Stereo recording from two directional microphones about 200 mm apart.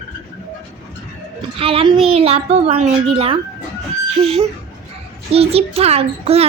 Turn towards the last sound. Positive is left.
turn(degrees=-30)  # may be behind; listen again after turning